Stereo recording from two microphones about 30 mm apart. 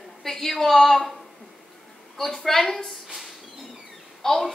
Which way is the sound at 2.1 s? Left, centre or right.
Centre.